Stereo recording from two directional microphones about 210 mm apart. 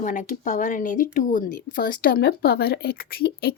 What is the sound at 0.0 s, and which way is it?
Speech, 40° left (ahead or behind).